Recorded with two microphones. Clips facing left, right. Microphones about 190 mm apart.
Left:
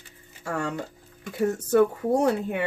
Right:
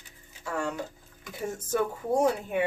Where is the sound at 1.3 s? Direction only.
65° left (ahead or behind).